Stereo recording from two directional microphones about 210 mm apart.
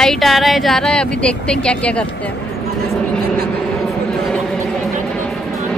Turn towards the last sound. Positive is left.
turn(degrees=5)  # may be behind; listen again after turning